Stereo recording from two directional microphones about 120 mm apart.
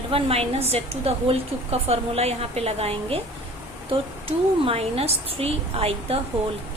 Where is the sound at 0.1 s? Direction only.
55° right (ahead or behind).